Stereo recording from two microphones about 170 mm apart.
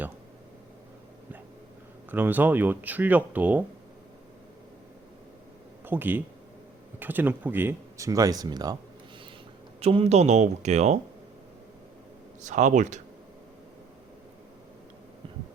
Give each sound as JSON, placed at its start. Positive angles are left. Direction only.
{"t": 2.0, "sound": "speech", "side_deg": -10}
{"t": 5.8, "sound": "speech", "side_deg": -10}
{"t": 9.8, "sound": "speech", "side_deg": -35}
{"t": 12.4, "sound": "speech", "side_deg": -45}